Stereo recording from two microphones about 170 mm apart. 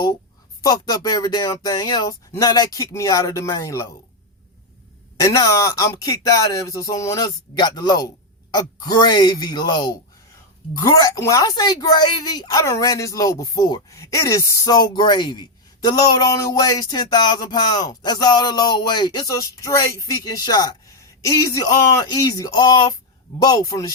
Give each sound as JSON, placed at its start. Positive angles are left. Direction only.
{"t": 0.6, "sound": "a woman's voice", "side_deg": 25}
{"t": 5.2, "sound": "a woman's voice", "side_deg": 20}